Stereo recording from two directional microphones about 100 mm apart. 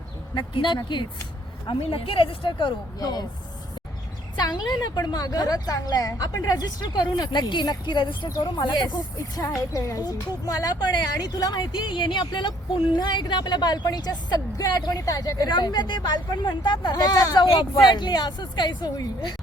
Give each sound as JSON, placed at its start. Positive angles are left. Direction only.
{"t": 0.3, "sound": "a woman's voice", "side_deg": 50}
{"t": 1.6, "sound": "speech", "side_deg": 65}
{"t": 4.4, "sound": "a woman's voice", "side_deg": 45}